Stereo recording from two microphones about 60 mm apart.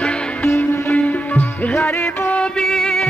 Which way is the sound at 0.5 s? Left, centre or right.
Left.